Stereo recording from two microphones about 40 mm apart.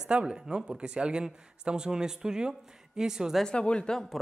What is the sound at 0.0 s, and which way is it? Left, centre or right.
Speech, right.